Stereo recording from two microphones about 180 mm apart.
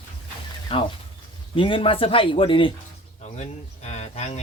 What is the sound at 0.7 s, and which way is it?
Speech, 30° left (ahead or behind).